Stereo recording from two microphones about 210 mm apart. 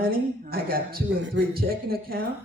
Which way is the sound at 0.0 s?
45° right (ahead or behind).